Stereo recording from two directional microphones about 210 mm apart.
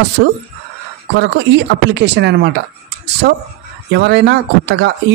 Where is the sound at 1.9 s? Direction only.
55° right (ahead or behind).